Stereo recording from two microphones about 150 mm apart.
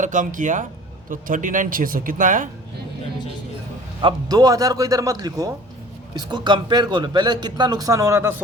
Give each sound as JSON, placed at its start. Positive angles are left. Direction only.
{"t": 0.0, "sound": "speech", "side_deg": -60}
{"t": 4.0, "sound": "speech", "side_deg": -25}